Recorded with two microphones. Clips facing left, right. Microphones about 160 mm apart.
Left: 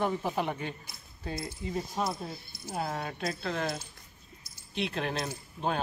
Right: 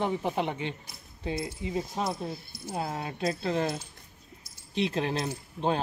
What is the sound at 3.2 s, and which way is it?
Speech, 30° right (ahead or behind).